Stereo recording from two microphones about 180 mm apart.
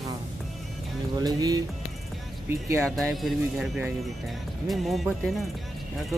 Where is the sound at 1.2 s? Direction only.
20° right (ahead or behind).